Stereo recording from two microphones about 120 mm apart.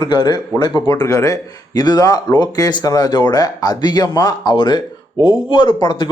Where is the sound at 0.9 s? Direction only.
30° left (ahead or behind).